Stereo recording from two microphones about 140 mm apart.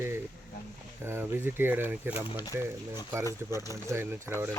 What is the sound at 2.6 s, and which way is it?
Speech, 20° right (ahead or behind).